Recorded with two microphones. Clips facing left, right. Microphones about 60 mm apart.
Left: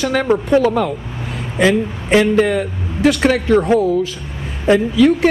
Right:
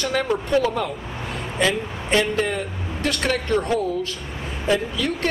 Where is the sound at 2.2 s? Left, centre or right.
Centre.